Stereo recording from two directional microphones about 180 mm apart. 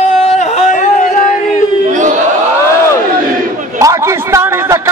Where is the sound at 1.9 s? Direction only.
45° right (ahead or behind).